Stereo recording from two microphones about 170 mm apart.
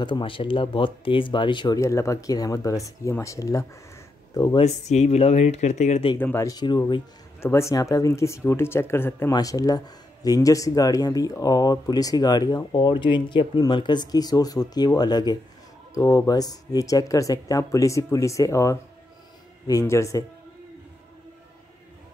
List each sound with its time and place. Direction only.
0.0 s speech: 30° left (ahead or behind)
4.6 s speech: 40° left (ahead or behind)
6.1 s speech: 15° left (ahead or behind)
7.3 s speech: 15° left (ahead or behind)